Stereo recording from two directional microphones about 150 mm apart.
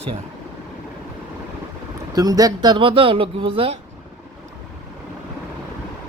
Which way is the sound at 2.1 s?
25° right (ahead or behind).